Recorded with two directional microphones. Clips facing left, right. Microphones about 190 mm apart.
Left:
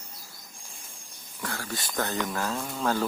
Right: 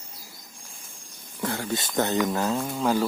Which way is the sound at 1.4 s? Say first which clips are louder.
Right 7 dB; 20° right (ahead or behind).